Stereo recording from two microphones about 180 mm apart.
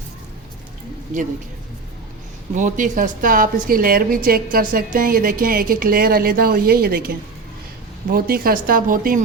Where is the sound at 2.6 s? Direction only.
45° right (ahead or behind).